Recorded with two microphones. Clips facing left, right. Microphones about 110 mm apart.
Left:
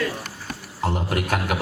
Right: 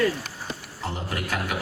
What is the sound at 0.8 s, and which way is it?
Speech, 60° left (ahead or behind).